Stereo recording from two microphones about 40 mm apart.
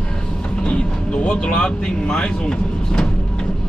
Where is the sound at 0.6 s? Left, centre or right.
Left.